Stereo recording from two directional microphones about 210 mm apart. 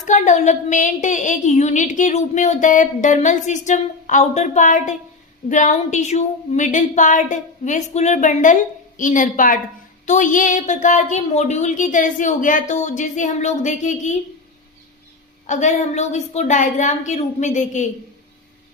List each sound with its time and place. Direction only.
0.0 s a woman's voice: 35° left (ahead or behind)
15.4 s a woman's voice: 35° left (ahead or behind)